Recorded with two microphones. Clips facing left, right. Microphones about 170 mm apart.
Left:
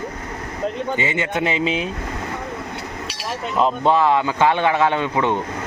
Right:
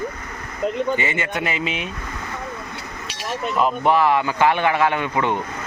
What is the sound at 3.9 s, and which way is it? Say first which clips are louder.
A man's voice: left 1 dB; 20° left (ahead or behind).